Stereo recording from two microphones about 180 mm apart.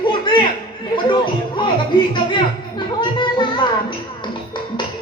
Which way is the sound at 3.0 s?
25° left (ahead or behind).